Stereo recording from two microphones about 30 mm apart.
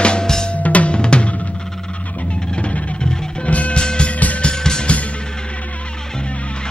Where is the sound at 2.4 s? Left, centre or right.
Left.